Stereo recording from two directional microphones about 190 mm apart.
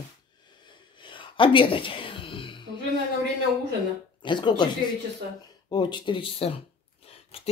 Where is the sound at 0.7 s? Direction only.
25° left (ahead or behind).